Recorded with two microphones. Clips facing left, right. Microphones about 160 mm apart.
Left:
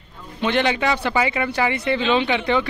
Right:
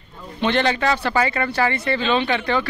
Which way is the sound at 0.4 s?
10° left (ahead or behind).